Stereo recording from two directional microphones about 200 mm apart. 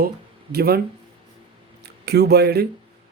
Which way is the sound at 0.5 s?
50° right (ahead or behind).